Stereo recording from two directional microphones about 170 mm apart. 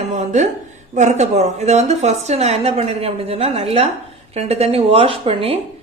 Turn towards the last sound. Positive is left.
turn(degrees=-35)  # may be behind; listen again after turning